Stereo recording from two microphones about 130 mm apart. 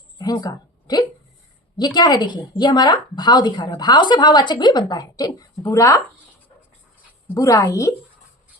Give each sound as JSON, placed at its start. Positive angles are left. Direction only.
{"t": 0.2, "sound": "a woman's voice", "side_deg": 30}
{"t": 7.3, "sound": "a woman's voice", "side_deg": 25}